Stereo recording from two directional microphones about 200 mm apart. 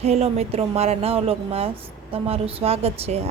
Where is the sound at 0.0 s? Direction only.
30° right (ahead or behind).